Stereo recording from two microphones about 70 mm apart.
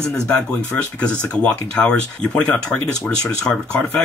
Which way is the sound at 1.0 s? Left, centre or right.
Centre.